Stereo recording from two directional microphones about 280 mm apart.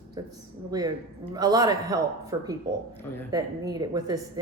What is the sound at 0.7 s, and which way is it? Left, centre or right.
Speech, centre.